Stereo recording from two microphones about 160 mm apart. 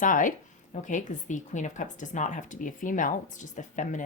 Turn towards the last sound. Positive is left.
turn(degrees=50)  # may be behind; listen again after turning